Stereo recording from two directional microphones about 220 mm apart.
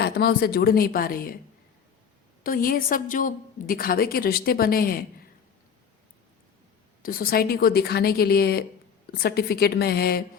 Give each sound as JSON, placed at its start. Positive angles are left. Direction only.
{"t": 0.0, "sound": "a woman's voice", "side_deg": 45}
{"t": 2.4, "sound": "a woman's voice", "side_deg": 40}
{"t": 7.0, "sound": "a woman's voice", "side_deg": 40}